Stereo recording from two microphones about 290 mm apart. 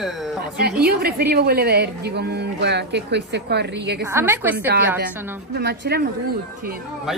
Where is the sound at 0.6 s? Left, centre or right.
Right.